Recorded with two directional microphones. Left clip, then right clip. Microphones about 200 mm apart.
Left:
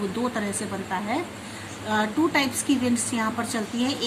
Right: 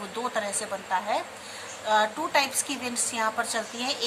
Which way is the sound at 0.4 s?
15° right (ahead or behind).